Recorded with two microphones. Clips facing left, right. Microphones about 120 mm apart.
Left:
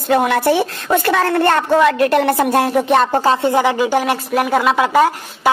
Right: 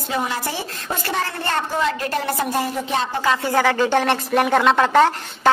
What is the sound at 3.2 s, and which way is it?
Speech, 30° left (ahead or behind).